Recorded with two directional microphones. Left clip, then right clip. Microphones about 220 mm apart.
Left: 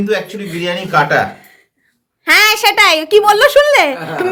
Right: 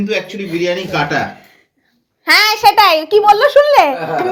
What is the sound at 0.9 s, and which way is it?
Speech, 35° left (ahead or behind).